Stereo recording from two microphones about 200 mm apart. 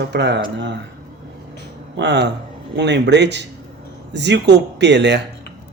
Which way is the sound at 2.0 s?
60° right (ahead or behind).